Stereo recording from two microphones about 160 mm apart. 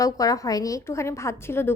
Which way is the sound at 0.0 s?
20° left (ahead or behind).